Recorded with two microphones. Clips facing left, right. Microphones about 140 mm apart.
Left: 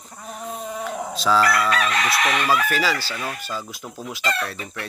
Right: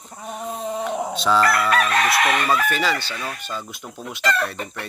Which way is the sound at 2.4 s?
5° left (ahead or behind).